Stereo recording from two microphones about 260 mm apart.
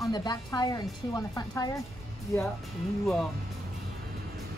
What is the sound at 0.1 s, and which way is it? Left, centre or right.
A woman's voice, centre.